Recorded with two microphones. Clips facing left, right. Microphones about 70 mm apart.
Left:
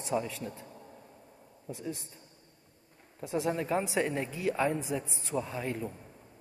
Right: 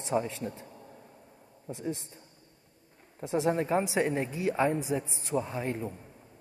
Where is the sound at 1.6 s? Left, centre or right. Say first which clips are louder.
Right 3 dB; right.